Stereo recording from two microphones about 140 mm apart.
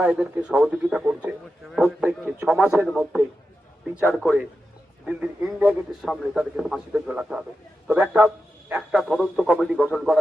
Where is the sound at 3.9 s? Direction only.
10° right (ahead or behind).